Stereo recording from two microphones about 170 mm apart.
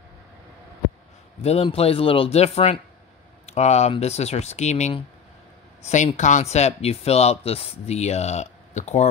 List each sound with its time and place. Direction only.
1.4 s speech: 35° left (ahead or behind)
6.1 s speech: 45° left (ahead or behind)